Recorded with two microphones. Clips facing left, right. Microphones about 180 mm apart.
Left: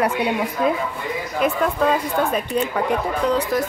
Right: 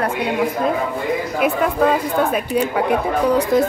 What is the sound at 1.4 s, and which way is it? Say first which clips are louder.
A woman's voice: right 2 dB; 5° right (ahead or behind).